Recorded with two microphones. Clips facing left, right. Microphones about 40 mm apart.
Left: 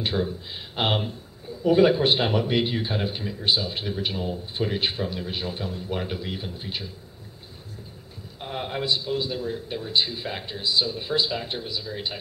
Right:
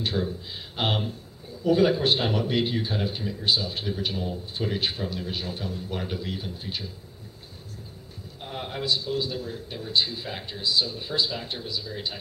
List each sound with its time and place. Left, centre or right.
0.0 s a man's voice: centre
8.4 s a man's voice: centre